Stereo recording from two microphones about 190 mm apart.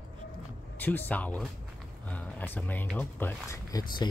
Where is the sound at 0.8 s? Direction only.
10° left (ahead or behind).